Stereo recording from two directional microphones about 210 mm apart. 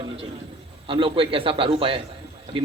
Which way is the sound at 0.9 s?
25° right (ahead or behind).